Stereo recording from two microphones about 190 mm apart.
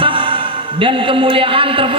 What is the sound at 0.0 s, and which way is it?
A man's voice, 25° right (ahead or behind).